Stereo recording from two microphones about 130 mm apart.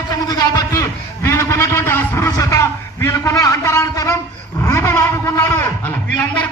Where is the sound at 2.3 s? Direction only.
25° left (ahead or behind).